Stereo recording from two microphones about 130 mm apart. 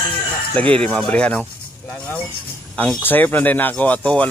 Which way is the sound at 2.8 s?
10° left (ahead or behind).